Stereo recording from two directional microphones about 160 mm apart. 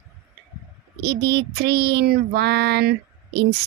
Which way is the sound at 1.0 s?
90° right.